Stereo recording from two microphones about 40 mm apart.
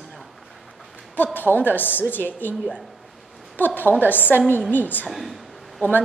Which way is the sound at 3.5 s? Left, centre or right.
Left.